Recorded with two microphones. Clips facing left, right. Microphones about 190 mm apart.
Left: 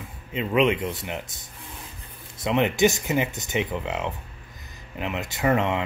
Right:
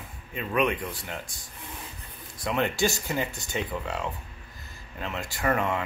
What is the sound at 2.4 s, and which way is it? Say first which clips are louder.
Speech: left 5 dB; 20° left (ahead or behind).